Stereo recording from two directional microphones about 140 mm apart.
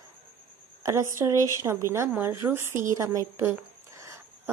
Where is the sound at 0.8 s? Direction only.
20° right (ahead or behind).